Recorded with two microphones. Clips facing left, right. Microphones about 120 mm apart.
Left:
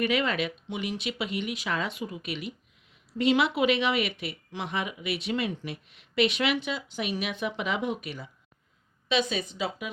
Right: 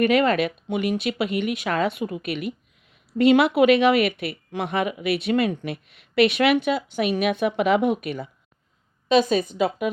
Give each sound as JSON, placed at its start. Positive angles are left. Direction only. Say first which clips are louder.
{"t": 0.0, "sound": "speech", "louder": "right 8 dB", "side_deg": -50}
{"t": 9.0, "sound": "speech", "louder": "right 9 dB", "side_deg": -45}